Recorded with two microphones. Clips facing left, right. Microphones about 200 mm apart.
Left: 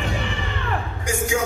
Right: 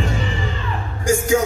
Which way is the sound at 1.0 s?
45° right (ahead or behind).